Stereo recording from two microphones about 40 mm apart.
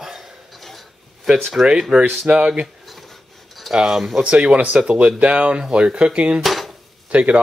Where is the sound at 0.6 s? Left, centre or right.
Centre.